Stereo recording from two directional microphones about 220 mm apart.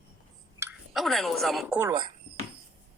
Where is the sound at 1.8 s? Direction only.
20° right (ahead or behind).